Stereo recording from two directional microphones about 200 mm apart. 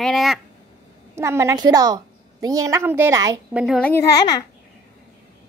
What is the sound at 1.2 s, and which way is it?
A woman's voice, 15° right (ahead or behind).